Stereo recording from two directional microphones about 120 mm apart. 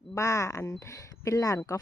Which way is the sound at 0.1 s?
25° left (ahead or behind).